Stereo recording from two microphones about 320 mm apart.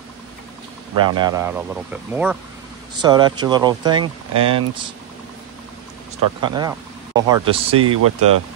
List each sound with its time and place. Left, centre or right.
0.9 s speech: centre
6.4 s speech: centre
7.8 s speech: right